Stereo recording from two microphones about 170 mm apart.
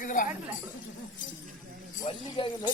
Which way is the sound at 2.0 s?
30° left (ahead or behind).